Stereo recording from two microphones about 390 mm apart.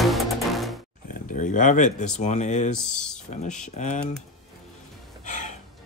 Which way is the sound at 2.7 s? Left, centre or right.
Centre.